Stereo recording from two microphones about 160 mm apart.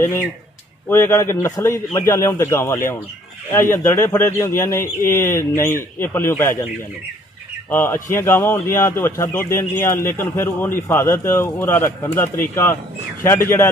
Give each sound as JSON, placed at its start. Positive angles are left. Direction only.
{"t": 0.0, "sound": "speech", "side_deg": 15}
{"t": 7.7, "sound": "speech", "side_deg": 15}